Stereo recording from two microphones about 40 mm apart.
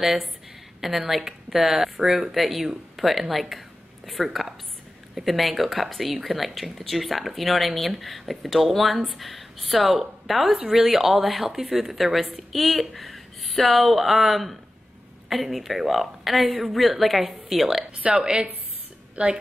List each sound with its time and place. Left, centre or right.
0.0 s speech: centre
4.3 s a sound: centre
5.1 s speech: centre
18.1 s a woman's voice: centre
19.2 s a woman's voice: right